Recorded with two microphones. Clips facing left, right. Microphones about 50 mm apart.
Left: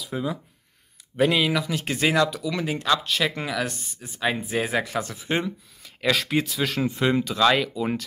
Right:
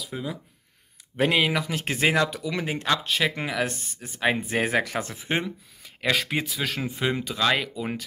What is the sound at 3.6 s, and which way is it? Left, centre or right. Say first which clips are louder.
Speech: right 1 dB; right.